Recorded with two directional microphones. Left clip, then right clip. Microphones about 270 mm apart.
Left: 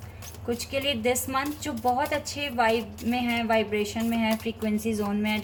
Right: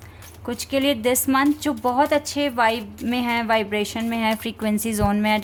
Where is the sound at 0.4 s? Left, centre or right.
Right.